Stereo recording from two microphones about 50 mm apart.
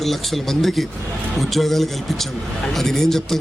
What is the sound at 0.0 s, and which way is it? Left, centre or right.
A man's voice, centre.